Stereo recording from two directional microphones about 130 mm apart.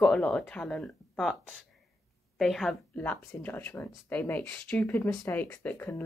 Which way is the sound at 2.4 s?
Centre (ahead or behind).